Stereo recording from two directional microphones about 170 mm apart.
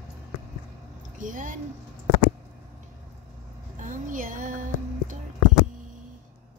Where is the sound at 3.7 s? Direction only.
50° right (ahead or behind).